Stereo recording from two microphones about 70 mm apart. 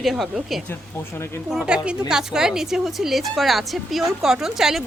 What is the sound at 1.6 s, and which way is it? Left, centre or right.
A woman's voice, centre.